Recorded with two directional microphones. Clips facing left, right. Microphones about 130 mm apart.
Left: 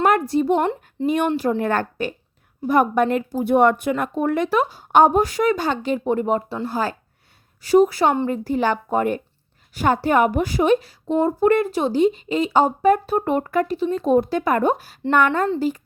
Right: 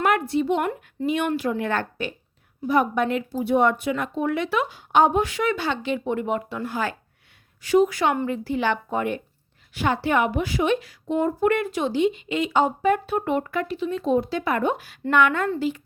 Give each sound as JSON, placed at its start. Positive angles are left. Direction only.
{"t": 0.0, "sound": "a sound", "side_deg": 40}
{"t": 0.6, "sound": "speech", "side_deg": 25}
{"t": 1.0, "sound": "a woman's voice", "side_deg": 40}
{"t": 8.3, "sound": "a woman's voice", "side_deg": 40}